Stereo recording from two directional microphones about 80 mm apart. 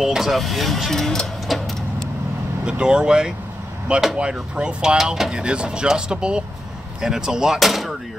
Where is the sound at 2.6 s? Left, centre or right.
Centre.